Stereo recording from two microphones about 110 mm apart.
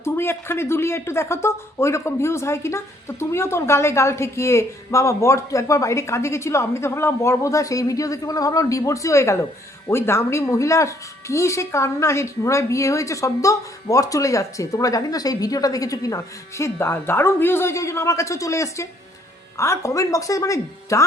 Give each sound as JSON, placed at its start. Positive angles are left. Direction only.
{"t": 0.0, "sound": "speech", "side_deg": 20}